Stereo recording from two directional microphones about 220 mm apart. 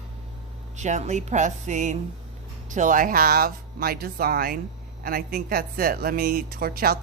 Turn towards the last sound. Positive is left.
turn(degrees=-40)  # may be behind; listen again after turning